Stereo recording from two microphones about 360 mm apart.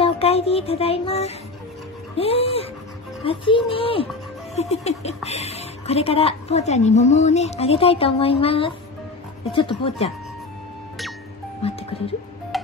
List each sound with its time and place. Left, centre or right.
0.0 s speech: centre
11.9 s speech: centre